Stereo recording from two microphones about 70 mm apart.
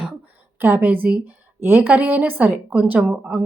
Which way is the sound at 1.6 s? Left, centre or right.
Right.